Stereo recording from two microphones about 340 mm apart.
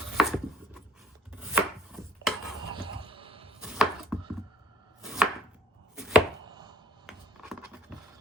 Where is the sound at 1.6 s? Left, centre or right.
Centre.